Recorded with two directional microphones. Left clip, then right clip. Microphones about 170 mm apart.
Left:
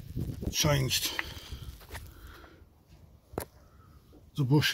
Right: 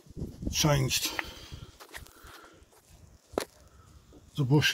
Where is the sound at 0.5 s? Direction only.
30° right (ahead or behind).